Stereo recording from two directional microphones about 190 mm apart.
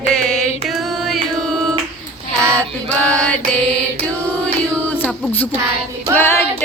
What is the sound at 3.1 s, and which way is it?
Mantra, 5° left (ahead or behind).